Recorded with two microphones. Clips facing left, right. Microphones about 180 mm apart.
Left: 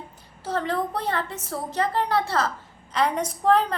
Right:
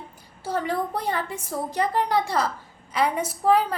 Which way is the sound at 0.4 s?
10° right (ahead or behind).